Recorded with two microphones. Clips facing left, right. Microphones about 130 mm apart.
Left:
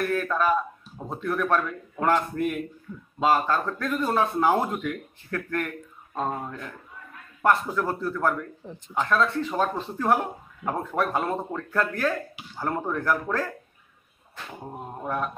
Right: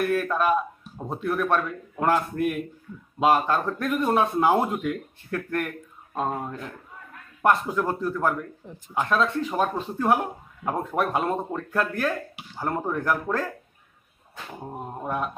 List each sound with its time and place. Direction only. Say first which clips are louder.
0.0 s speech: right 1 dB; 10° right (ahead or behind)
9.0 s speech: even; 20° right (ahead or behind)
10.8 s speech: right 1 dB; 20° right (ahead or behind)
14.6 s speech: right 2 dB; 10° right (ahead or behind)